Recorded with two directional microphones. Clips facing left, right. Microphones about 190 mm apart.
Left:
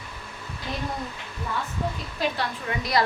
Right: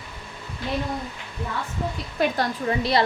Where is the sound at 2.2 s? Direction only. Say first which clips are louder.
Right 6 dB; 45° right (ahead or behind).